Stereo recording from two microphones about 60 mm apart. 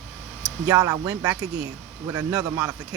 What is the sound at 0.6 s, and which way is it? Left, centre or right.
Speech, right.